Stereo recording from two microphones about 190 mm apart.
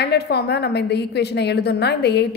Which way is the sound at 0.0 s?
60° left (ahead or behind).